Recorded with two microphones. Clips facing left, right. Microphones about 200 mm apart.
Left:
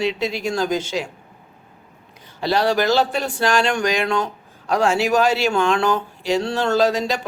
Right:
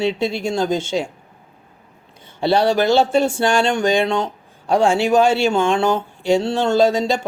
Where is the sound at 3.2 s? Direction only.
25° right (ahead or behind).